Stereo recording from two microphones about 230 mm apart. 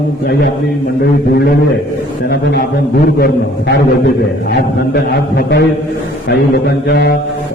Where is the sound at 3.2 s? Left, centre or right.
Left.